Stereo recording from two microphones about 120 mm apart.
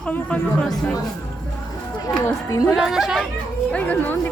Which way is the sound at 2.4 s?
25° left (ahead or behind).